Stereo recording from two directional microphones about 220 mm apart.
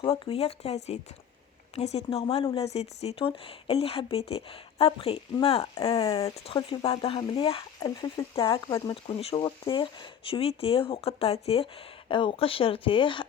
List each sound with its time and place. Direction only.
0.0 s speech: 25° left (ahead or behind)